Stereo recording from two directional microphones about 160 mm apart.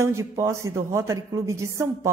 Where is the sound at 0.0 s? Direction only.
15° right (ahead or behind).